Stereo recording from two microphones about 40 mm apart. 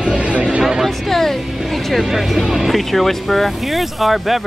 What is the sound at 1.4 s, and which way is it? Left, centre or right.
Music, centre.